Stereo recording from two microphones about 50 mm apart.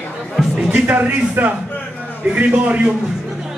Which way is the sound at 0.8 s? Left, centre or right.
Right.